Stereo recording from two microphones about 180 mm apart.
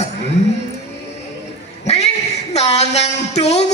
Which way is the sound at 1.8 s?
35° left (ahead or behind).